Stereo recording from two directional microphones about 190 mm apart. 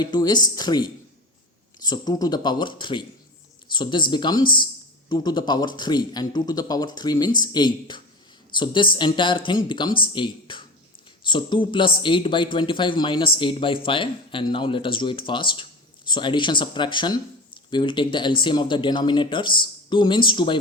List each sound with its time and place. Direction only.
0.0 s speech: 20° left (ahead or behind)
1.9 s speech: 20° left (ahead or behind)